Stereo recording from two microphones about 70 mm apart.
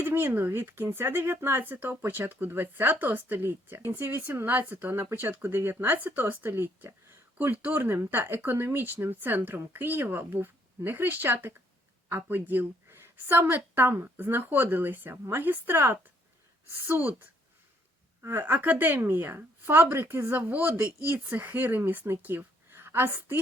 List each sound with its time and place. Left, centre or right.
0.0 s speech: right
17.0 s speech: right
18.2 s speech: right